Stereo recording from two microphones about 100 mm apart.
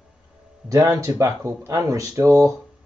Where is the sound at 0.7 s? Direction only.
35° right (ahead or behind).